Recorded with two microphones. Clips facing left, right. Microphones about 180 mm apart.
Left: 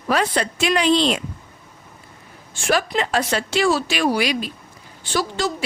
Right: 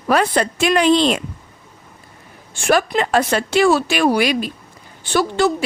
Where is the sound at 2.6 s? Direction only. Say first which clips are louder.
Right 4 dB; 55° right (ahead or behind).